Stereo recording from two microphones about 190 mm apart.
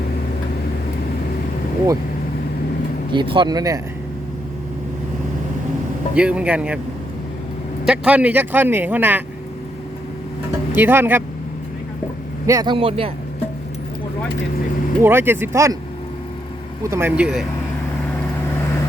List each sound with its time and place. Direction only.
3.1 s speech: 25° right (ahead or behind)
6.1 s speech: 5° right (ahead or behind)
7.9 s speech: 5° right (ahead or behind)
10.8 s speech: 10° right (ahead or behind)
12.5 s speech: 20° right (ahead or behind)
15.0 s speech: 10° right (ahead or behind)
16.8 s speech: 15° right (ahead or behind)